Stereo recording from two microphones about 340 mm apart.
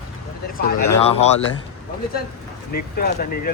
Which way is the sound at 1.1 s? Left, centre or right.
Centre.